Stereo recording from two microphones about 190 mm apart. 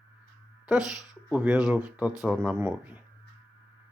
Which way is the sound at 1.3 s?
5° right (ahead or behind).